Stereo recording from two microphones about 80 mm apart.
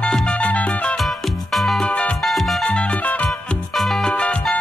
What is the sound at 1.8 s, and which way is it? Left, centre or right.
Music, centre.